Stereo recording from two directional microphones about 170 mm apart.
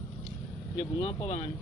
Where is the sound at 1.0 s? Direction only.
30° left (ahead or behind).